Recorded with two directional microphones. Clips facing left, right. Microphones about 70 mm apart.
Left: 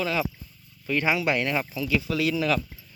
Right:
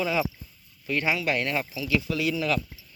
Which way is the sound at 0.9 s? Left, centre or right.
Centre.